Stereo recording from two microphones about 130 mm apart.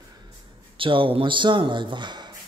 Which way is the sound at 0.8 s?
40° right (ahead or behind).